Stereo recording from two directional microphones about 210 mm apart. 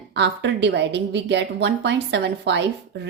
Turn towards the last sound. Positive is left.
turn(degrees=-55)  # may be behind; listen again after turning